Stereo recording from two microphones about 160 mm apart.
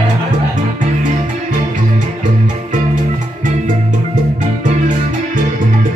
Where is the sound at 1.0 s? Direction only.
50° right (ahead or behind).